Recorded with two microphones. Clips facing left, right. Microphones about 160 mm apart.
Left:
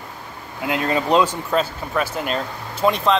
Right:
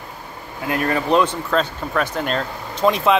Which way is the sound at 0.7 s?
20° left (ahead or behind).